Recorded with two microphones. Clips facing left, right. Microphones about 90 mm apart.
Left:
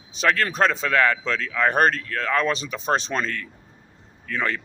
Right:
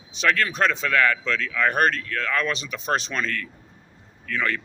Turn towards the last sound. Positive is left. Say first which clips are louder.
# even
turn(degrees=30)  # may be behind; listen again after turning